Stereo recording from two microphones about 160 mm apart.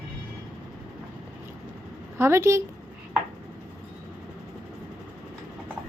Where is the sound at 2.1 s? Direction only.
15° right (ahead or behind).